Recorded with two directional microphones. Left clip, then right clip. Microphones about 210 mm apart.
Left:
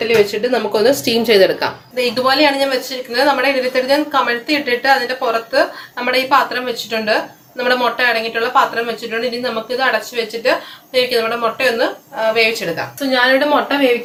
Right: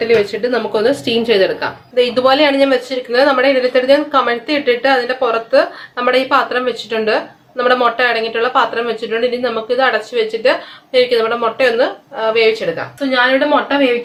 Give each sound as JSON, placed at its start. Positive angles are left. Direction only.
{"t": 0.1, "sound": "speech", "side_deg": 0}
{"t": 2.1, "sound": "speech", "side_deg": -20}
{"t": 10.9, "sound": "speech", "side_deg": -20}
{"t": 13.0, "sound": "speech", "side_deg": 0}